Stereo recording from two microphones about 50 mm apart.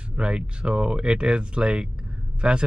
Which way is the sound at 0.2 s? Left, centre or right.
Right.